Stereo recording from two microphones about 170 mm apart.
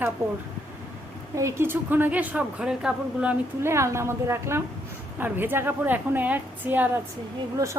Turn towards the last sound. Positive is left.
turn(degrees=-15)  # may be behind; listen again after turning